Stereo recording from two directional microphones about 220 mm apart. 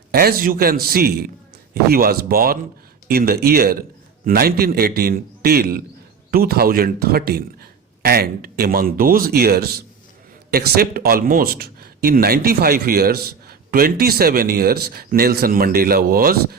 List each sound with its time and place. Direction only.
0.1 s speech: 45° right (ahead or behind)